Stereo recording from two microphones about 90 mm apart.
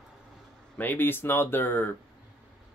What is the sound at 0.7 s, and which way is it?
Speech, 20° left (ahead or behind).